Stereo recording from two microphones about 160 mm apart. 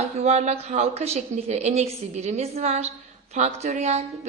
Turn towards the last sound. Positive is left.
turn(degrees=-45)  # may be behind; listen again after turning